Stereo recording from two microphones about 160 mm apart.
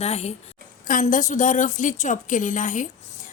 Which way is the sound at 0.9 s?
55° left (ahead or behind).